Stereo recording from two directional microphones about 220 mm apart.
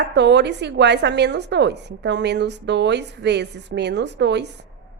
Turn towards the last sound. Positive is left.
turn(degrees=-50)  # may be behind; listen again after turning